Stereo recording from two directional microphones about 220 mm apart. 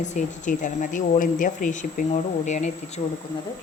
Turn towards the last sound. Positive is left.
turn(degrees=35)  # may be behind; listen again after turning